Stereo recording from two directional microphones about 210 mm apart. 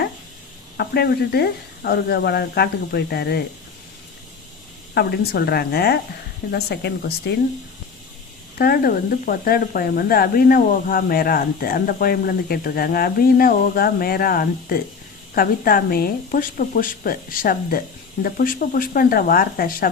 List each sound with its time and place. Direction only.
0.8 s speech: 50° left (ahead or behind)
4.9 s speech: 50° left (ahead or behind)
8.5 s speech: 45° left (ahead or behind)